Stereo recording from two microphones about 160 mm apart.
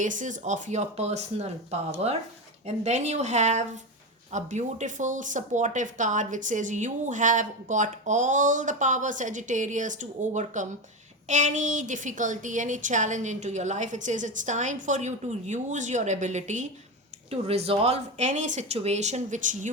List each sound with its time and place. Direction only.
0.0 s speech: 50° right (ahead or behind)